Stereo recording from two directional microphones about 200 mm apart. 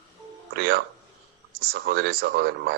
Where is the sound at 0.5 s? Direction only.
55° right (ahead or behind).